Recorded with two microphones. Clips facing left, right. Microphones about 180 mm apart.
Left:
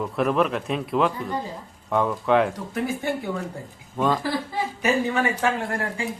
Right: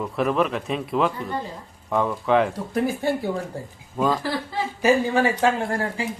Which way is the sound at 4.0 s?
Centre (ahead or behind).